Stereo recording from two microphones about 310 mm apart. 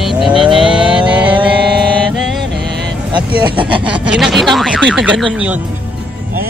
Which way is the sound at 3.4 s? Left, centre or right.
Centre.